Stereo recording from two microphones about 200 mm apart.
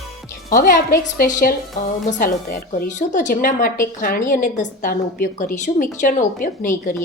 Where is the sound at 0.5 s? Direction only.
45° left (ahead or behind).